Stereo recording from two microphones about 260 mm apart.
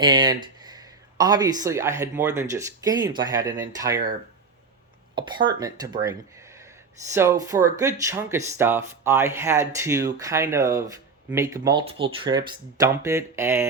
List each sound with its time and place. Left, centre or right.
0.0 s speech: centre
5.1 s speech: centre